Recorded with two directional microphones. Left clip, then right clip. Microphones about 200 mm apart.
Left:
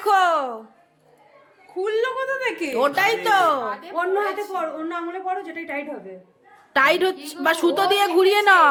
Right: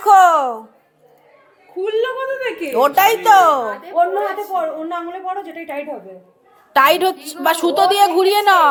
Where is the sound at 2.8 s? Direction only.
5° right (ahead or behind).